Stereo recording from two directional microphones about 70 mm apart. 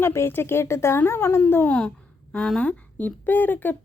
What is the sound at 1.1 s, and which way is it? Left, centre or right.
Speech, left.